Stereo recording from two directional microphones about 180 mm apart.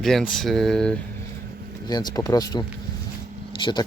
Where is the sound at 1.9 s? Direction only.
20° left (ahead or behind).